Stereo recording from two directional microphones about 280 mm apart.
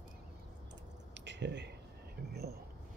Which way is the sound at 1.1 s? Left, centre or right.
Right.